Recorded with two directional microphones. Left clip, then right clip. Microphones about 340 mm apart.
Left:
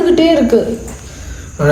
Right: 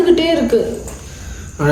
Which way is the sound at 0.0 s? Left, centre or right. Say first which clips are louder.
Left 3 dB; centre.